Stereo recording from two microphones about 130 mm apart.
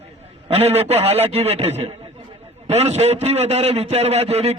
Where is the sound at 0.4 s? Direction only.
50° right (ahead or behind).